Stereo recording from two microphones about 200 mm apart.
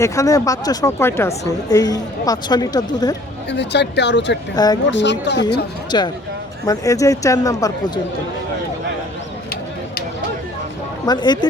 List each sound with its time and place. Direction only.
0.0 s speech: 15° left (ahead or behind)
3.5 s speech: 60° left (ahead or behind)
4.5 s speech: 20° left (ahead or behind)
4.9 s speech: 65° left (ahead or behind)
5.5 s speech: 20° left (ahead or behind)
11.0 s speech: 20° left (ahead or behind)